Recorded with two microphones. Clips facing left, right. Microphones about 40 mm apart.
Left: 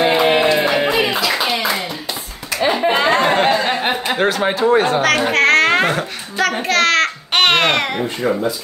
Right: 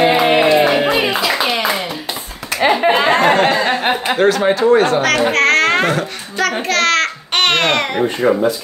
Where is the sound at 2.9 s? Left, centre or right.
Centre.